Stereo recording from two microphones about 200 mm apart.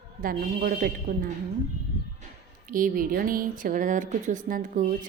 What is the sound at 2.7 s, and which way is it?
A woman's voice, 45° right (ahead or behind).